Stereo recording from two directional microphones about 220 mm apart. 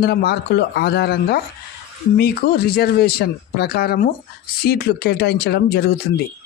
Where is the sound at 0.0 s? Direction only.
45° left (ahead or behind).